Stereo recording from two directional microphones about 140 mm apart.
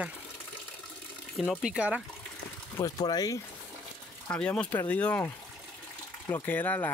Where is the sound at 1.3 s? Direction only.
5° left (ahead or behind).